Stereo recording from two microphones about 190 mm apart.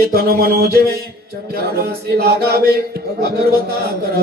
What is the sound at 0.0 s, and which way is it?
Speech, 50° right (ahead or behind).